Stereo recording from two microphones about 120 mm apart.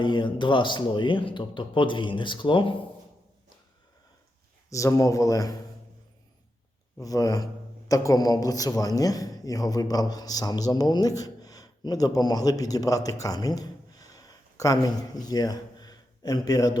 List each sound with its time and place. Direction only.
0.0 s speech: 40° left (ahead or behind)
4.7 s a man's voice: 25° left (ahead or behind)
7.0 s a man's voice: 30° left (ahead or behind)